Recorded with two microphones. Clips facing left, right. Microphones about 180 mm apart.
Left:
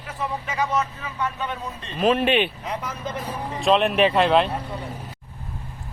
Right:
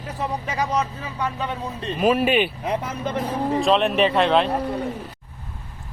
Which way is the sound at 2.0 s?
10° right (ahead or behind).